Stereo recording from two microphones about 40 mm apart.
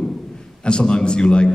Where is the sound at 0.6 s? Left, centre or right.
Left.